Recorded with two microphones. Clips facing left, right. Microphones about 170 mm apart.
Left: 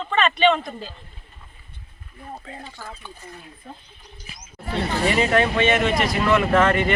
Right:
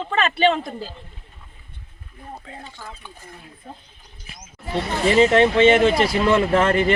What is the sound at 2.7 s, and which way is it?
Speech, 5° left (ahead or behind).